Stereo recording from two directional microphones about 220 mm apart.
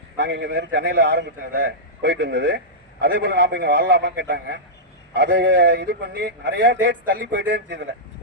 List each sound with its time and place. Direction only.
0.2 s a man's voice: 50° right (ahead or behind)